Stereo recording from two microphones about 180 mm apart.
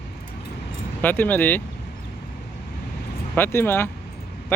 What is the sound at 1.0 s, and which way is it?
Speech, 10° left (ahead or behind).